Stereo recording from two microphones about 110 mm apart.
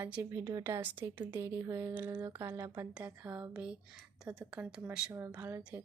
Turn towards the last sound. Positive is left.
turn(degrees=-20)  # may be behind; listen again after turning